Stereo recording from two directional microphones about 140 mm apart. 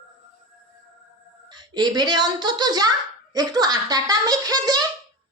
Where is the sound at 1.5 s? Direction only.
30° right (ahead or behind).